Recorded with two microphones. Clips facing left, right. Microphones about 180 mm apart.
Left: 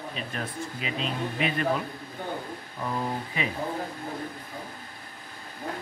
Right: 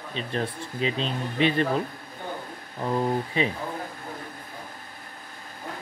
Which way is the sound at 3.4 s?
30° right (ahead or behind).